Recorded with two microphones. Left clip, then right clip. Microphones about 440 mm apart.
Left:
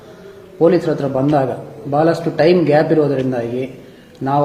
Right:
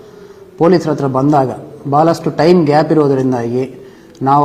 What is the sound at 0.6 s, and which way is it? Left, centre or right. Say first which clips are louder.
Speech: right 2 dB; right.